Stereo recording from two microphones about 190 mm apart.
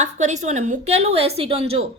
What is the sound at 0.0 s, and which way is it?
A woman's voice, 40° right (ahead or behind).